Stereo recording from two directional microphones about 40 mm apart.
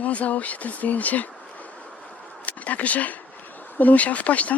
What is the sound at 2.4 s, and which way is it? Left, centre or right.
Speech, left.